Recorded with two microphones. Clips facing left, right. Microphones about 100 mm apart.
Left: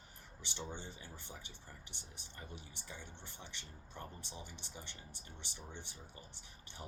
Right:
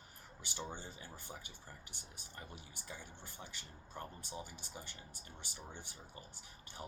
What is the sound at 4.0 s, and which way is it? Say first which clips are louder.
Speech: right 3 dB; 45° right (ahead or behind).